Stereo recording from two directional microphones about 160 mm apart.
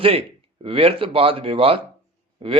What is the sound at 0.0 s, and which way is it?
Speech, 35° right (ahead or behind).